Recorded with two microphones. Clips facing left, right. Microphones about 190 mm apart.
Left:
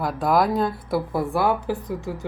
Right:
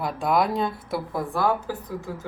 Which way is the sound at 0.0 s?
Centre (ahead or behind).